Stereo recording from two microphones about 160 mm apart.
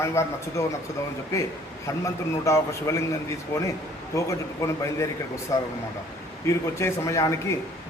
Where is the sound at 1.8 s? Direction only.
20° left (ahead or behind).